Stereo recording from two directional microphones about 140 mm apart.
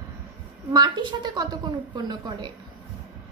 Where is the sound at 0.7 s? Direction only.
30° right (ahead or behind).